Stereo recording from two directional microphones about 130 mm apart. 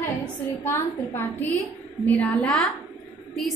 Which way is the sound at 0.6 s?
20° left (ahead or behind).